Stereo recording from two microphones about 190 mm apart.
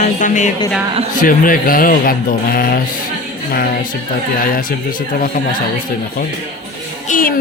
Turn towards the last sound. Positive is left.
turn(degrees=45)  # may be behind; listen again after turning